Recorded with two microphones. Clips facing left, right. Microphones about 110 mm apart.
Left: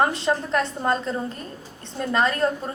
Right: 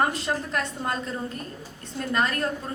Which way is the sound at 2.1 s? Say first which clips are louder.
Left 4 dB; 30° left (ahead or behind).